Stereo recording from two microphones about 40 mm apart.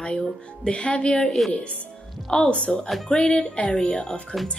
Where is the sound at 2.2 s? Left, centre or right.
Centre.